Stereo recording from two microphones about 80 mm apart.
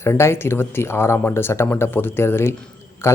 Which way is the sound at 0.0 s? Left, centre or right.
Left.